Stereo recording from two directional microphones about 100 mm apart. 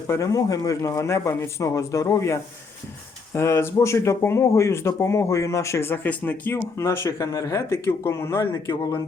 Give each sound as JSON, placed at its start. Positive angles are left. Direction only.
{"t": 0.1, "sound": "speech", "side_deg": 35}